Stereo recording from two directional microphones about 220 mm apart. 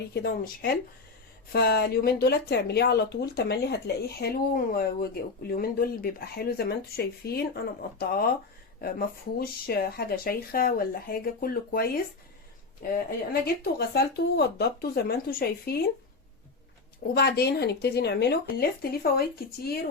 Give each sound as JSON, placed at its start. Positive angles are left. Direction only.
{"t": 0.1, "sound": "speech", "side_deg": 45}
{"t": 12.9, "sound": "speech", "side_deg": 45}
{"t": 17.2, "sound": "speech", "side_deg": 45}